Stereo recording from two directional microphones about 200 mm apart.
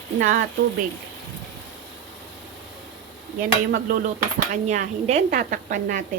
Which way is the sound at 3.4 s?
45° right (ahead or behind).